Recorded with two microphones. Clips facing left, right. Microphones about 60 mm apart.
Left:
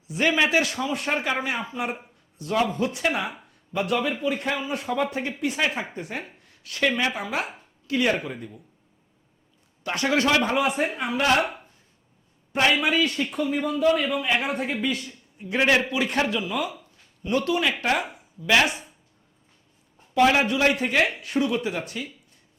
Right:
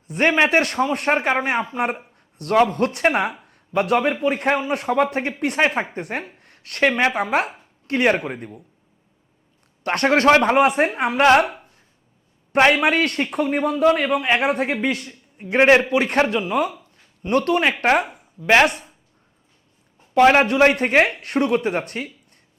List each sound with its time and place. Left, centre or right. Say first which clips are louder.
0.1 s a man's voice: right 4 dB; right
3.5 s a man's voice: right 6 dB; right
9.8 s a man's voice: right 7 dB; right
12.5 s a man's voice: right 5 dB; right
20.1 s a man's voice: right 6 dB; right
20.4 s a man's voice: right 6 dB; right